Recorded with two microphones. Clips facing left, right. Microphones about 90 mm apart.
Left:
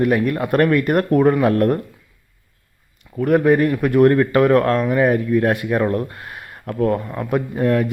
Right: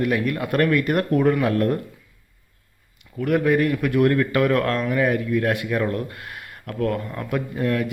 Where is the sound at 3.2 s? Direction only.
35° left (ahead or behind).